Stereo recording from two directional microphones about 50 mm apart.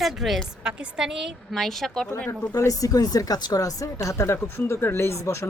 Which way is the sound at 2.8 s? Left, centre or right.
Left.